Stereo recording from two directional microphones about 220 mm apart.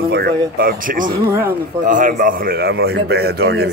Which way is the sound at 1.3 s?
10° right (ahead or behind).